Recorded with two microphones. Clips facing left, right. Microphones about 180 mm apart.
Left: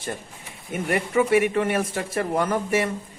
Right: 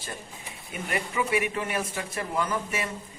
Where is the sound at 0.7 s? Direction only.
50° left (ahead or behind).